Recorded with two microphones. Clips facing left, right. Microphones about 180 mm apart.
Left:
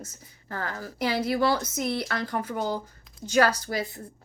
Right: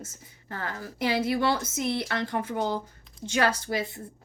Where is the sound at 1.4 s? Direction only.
40° left (ahead or behind).